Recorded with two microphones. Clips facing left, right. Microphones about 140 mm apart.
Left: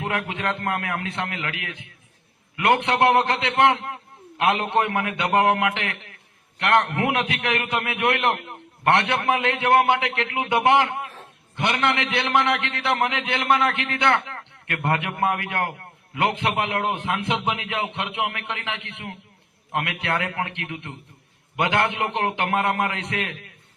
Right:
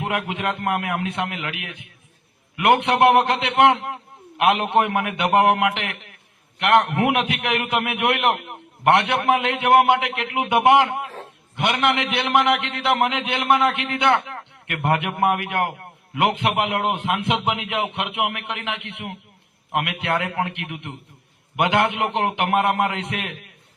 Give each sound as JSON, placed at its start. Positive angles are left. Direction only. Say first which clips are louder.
{"t": 0.0, "sound": "a man's voice", "louder": "right 2 dB", "side_deg": -20}